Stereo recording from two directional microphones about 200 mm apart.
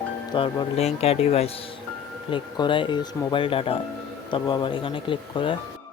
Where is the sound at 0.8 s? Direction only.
30° left (ahead or behind).